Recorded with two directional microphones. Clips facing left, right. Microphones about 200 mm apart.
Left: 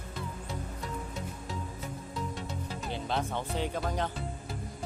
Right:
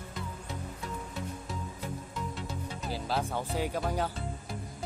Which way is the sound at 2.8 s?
5° right (ahead or behind).